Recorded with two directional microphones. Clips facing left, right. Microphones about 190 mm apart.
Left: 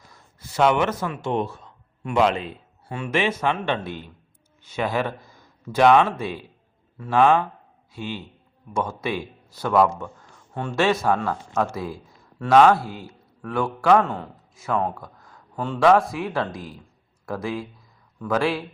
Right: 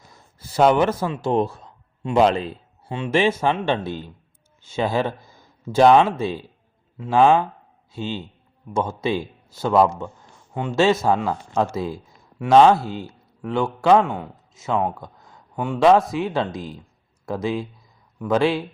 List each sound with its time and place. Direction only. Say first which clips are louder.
0.1 s a man's voice: right 2 dB; 30° right (ahead or behind)